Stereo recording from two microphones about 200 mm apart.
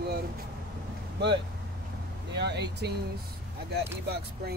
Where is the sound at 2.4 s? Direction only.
55° right (ahead or behind).